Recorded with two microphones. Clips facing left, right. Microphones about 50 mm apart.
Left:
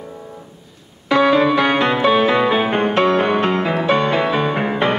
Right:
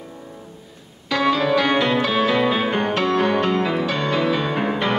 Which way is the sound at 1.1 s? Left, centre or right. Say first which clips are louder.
Left 5 dB; left.